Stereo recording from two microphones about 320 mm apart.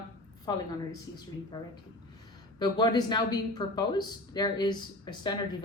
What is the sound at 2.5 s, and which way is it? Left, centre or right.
A woman's voice, centre.